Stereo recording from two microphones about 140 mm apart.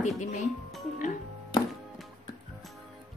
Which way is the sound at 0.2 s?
60° left (ahead or behind).